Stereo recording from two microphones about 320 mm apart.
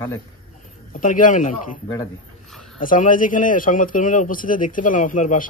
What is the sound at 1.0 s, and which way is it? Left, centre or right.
Speech, left.